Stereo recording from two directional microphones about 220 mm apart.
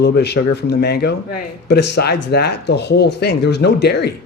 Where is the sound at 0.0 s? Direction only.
50° left (ahead or behind).